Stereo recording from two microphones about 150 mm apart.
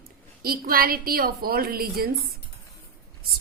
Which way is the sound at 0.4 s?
80° right.